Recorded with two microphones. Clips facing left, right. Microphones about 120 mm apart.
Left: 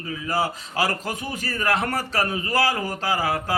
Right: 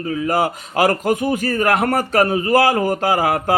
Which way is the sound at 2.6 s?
50° right (ahead or behind).